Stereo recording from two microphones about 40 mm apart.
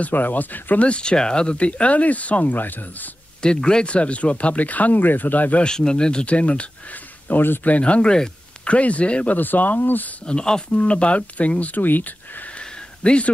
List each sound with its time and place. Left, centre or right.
0.1 s speech: left
0.8 s speech: left
3.4 s speech: left
5.6 s speech: centre
7.2 s speech: left
7.6 s speech: left
8.6 s speech: left
9.3 s speech: left
10.2 s speech: centre
10.7 s speech: left
12.5 s a sound: left